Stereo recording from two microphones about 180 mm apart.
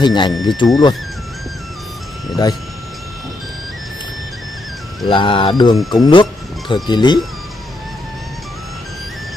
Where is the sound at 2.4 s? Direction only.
20° left (ahead or behind).